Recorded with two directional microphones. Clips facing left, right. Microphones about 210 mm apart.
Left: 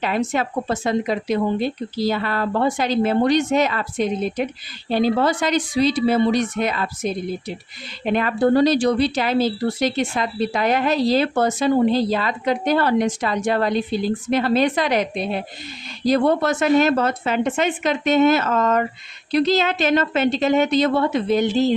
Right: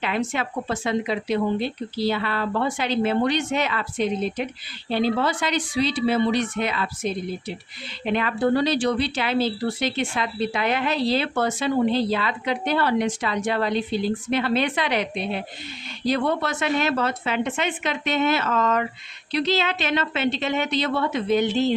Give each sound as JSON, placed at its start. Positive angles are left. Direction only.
{"t": 0.0, "sound": "a woman's voice", "side_deg": 40}